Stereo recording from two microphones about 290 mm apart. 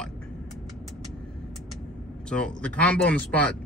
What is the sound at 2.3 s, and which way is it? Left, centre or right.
Speech, centre.